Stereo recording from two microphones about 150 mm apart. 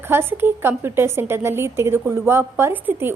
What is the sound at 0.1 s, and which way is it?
A woman's voice, 15° right (ahead or behind).